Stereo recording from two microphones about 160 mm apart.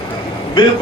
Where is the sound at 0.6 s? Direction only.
30° left (ahead or behind).